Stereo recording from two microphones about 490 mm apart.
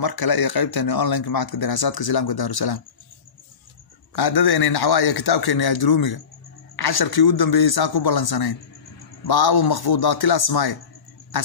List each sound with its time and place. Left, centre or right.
0.0 s speech: left
4.1 s speech: left